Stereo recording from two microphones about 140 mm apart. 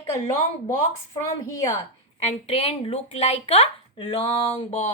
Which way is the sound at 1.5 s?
20° left (ahead or behind).